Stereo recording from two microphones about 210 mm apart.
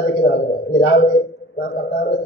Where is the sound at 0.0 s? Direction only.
55° left (ahead or behind).